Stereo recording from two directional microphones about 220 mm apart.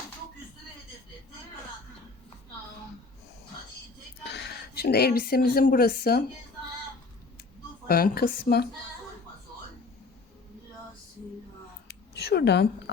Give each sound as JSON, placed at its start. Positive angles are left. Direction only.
{"t": 4.2, "sound": "a woman's voice", "side_deg": 50}
{"t": 7.9, "sound": "a woman's voice", "side_deg": 45}
{"t": 11.9, "sound": "a sound", "side_deg": 45}